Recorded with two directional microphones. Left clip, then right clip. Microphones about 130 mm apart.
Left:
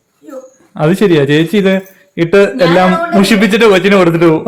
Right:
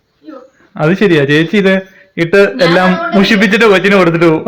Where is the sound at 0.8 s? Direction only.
25° left (ahead or behind).